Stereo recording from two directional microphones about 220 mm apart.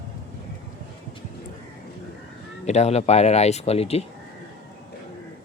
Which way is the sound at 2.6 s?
30° left (ahead or behind).